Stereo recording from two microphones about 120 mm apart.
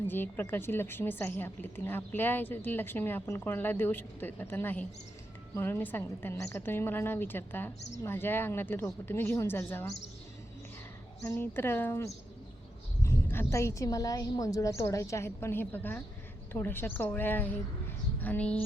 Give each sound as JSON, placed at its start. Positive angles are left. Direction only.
{"t": 0.1, "sound": "a woman's voice", "side_deg": 15}
{"t": 11.3, "sound": "a woman's voice", "side_deg": 20}